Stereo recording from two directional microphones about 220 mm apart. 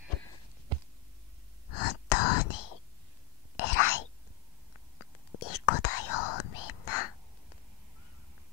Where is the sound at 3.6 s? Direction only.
85° left.